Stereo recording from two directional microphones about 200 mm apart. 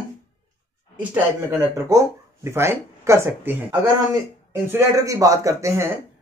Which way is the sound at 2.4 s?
10° right (ahead or behind).